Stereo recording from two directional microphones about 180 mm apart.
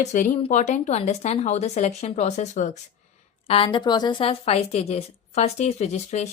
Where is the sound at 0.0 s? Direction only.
40° left (ahead or behind).